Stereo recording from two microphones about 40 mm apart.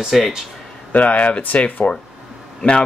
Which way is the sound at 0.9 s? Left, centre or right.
Left.